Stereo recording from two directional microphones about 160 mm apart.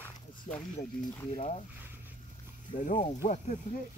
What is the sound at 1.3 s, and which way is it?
Speech, 40° left (ahead or behind).